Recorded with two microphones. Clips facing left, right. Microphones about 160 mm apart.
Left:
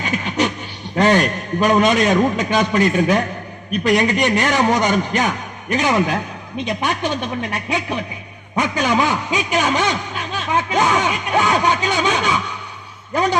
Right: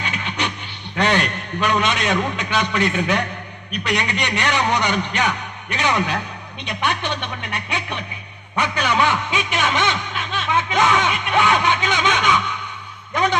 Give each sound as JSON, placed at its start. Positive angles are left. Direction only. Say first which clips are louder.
{"t": 0.0, "sound": "a man's voice", "louder": "left 6 dB", "side_deg": 40}